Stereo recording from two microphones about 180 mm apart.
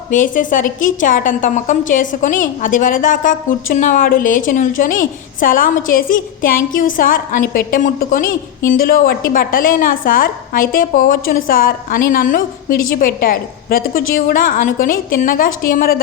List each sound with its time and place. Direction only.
0.1 s a woman's voice: 45° left (ahead or behind)